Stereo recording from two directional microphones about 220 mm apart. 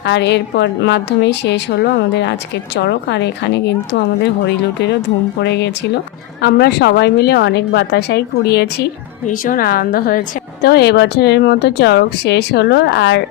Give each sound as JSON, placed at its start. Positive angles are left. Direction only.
{"t": 0.0, "sound": "a woman's voice", "side_deg": 50}
{"t": 9.2, "sound": "a woman's voice", "side_deg": 35}